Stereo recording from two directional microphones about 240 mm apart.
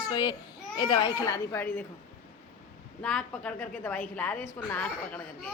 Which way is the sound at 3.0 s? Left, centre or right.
Centre.